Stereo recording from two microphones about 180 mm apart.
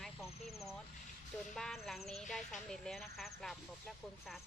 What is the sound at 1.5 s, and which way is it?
Speech, centre (ahead or behind).